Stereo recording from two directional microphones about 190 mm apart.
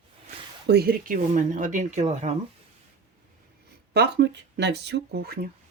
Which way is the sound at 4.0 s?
60° right (ahead or behind).